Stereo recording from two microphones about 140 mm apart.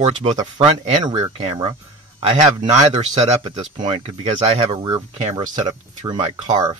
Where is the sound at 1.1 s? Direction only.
45° right (ahead or behind).